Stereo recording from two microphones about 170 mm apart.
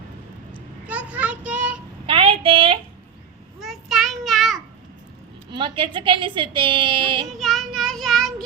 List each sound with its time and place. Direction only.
0.9 s child singing: 10° right (ahead or behind)
2.0 s child singing: 30° right (ahead or behind)
3.6 s child singing: centre (ahead or behind)
5.5 s a woman's voice: 30° right (ahead or behind)
7.3 s child singing: centre (ahead or behind)